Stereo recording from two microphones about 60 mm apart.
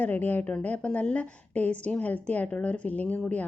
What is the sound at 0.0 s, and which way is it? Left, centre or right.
A woman's voice, left.